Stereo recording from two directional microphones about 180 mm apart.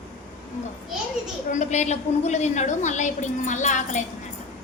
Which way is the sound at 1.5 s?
40° left (ahead or behind).